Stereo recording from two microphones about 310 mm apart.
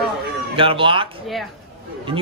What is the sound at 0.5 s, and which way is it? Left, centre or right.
Speech, centre.